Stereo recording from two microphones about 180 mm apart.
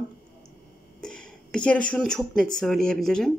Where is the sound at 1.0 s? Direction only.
5° left (ahead or behind).